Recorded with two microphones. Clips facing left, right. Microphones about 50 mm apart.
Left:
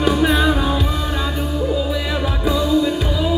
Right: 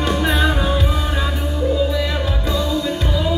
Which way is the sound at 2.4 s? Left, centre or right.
Centre.